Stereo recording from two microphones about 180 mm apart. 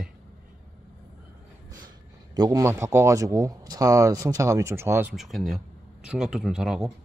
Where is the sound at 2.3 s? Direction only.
20° right (ahead or behind).